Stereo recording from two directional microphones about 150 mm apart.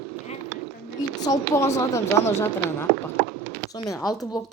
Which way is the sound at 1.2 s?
20° left (ahead or behind).